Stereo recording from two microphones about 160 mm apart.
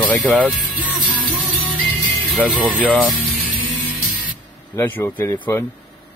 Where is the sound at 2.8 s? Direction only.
5° left (ahead or behind).